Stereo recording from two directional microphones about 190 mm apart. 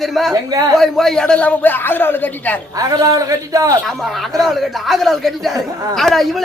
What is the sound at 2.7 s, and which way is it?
A man's voice, 20° right (ahead or behind).